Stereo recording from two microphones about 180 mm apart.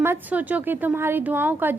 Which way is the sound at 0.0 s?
10° right (ahead or behind).